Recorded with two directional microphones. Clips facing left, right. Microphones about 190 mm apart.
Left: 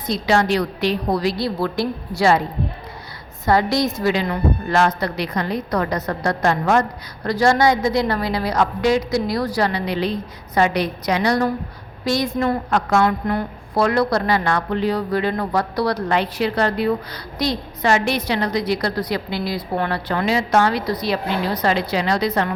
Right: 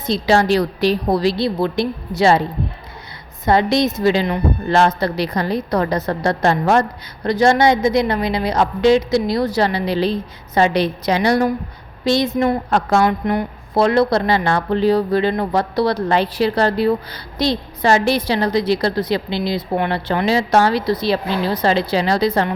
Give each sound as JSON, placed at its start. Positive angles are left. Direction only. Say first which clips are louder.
{"t": 0.0, "sound": "a woman's voice", "louder": "right 3 dB", "side_deg": -30}
{"t": 3.4, "sound": "a woman's voice", "louder": "right 2 dB", "side_deg": -20}